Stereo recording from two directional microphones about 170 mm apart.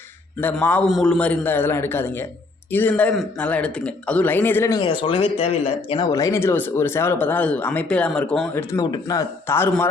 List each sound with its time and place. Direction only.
0.3 s a man's voice: 10° left (ahead or behind); by 6.1 s 35° left (ahead or behind)
6.1 s a man's voice: 20° left (ahead or behind)
8.7 s speech: 25° left (ahead or behind)